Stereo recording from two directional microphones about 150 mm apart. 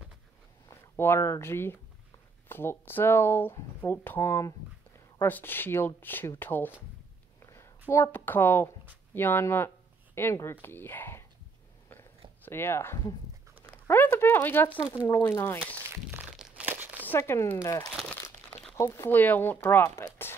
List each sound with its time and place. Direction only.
0.7 s speech: 15° left (ahead or behind)
7.4 s a sound: 20° left (ahead or behind)
7.9 s speech: 15° left (ahead or behind)
12.4 s speech: 15° left (ahead or behind)
13.8 s a sound: 15° left (ahead or behind)
14.8 s speech: 10° right (ahead or behind)
15.0 s speech: 20° left (ahead or behind)
16.2 s crumpling: 5° right (ahead or behind)
17.0 s speech: 15° left (ahead or behind)
17.9 s speech: 5° left (ahead or behind)
18.5 s crumpling: 5° left (ahead or behind)
18.8 s speech: 15° left (ahead or behind)